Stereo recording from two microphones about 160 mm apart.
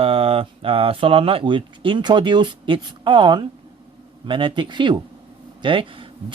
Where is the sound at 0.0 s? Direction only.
35° right (ahead or behind).